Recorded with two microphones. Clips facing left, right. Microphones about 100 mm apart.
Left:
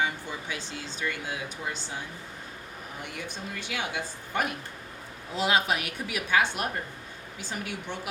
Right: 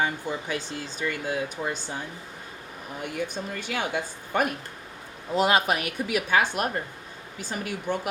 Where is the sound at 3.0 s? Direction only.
50° right (ahead or behind).